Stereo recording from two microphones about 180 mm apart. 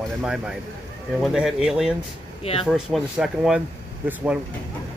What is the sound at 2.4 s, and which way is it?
Speech, 35° left (ahead or behind).